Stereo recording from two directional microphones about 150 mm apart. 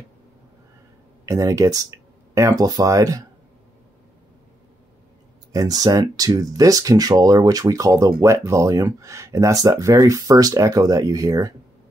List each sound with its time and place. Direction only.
1.2 s speech: 20° right (ahead or behind)
5.5 s speech: 25° right (ahead or behind)